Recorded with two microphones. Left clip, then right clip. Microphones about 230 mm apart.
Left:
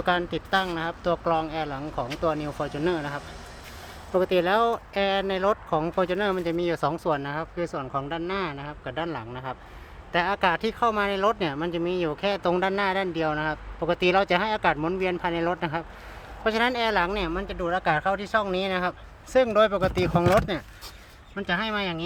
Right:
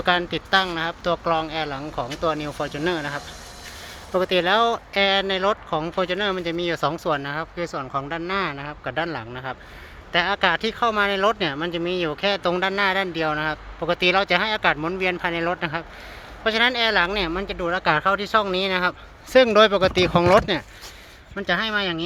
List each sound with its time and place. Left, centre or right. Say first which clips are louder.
0.0 s speech: right 4 dB; centre